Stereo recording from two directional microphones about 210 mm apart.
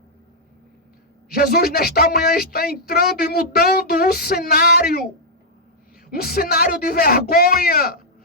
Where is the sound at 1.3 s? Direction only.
45° left (ahead or behind).